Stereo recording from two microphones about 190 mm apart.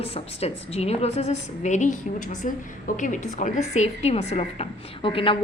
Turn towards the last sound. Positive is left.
turn(degrees=25)  # may be behind; listen again after turning